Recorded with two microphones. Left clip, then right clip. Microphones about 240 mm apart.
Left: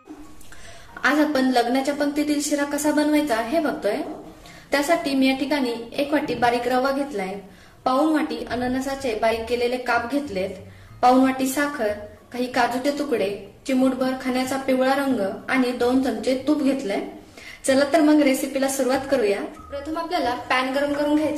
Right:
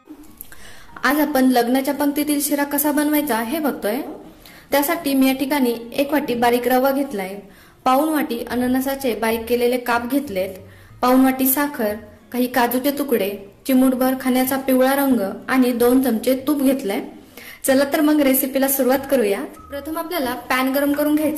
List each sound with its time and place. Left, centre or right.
1.0 s a woman's voice: right